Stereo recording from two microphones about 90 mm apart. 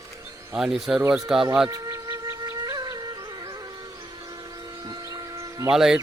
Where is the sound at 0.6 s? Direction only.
5° right (ahead or behind).